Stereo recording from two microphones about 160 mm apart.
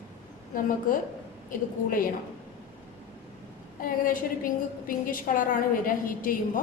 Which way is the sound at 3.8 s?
60° left (ahead or behind).